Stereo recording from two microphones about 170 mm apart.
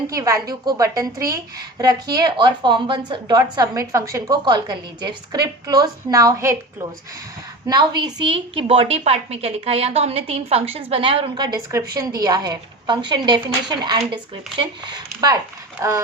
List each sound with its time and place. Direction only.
0.1 s a woman's voice: 20° right (ahead or behind)
7.7 s a woman's voice: 25° right (ahead or behind)